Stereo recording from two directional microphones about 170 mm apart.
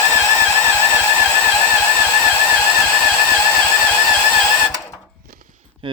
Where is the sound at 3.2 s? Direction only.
15° left (ahead or behind).